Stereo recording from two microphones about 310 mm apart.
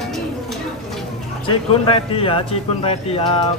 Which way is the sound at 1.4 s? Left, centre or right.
Centre.